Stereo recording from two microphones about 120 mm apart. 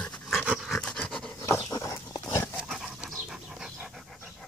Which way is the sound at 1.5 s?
30° left (ahead or behind).